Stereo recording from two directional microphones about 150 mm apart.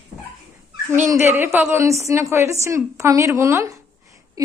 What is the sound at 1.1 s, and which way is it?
A woman's voice, 15° right (ahead or behind).